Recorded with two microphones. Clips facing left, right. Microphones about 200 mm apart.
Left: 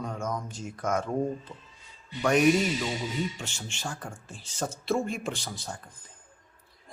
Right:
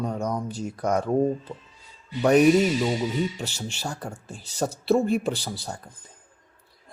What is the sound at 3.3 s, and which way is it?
Speech, 40° right (ahead or behind).